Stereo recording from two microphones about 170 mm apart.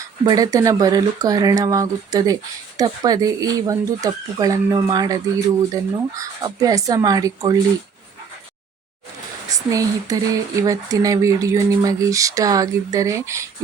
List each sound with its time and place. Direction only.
0.3 s speech: 20° right (ahead or behind)
9.5 s speech: 20° right (ahead or behind)